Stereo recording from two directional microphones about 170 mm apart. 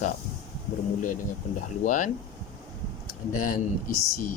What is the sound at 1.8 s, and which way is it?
Speech, 50° left (ahead or behind).